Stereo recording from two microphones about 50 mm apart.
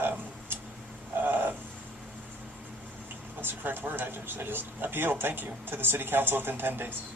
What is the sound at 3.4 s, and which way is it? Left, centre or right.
Speech, right.